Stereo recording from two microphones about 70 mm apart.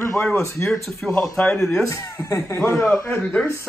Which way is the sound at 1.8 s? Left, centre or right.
Left.